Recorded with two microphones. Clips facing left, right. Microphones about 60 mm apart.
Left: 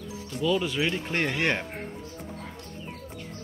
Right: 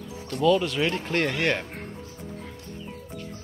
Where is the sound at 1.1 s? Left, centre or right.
Centre.